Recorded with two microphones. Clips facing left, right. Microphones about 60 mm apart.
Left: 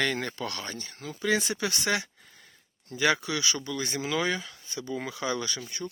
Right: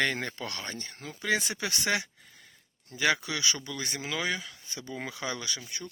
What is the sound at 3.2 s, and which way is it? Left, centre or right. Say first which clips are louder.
Speech: left 2 dB; right.